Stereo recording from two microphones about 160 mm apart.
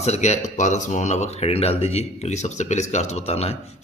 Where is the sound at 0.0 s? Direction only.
45° left (ahead or behind).